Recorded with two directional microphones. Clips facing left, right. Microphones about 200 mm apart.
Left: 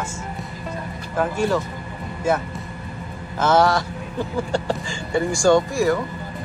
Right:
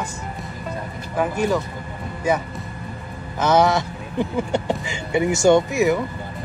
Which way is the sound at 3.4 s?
20° right (ahead or behind).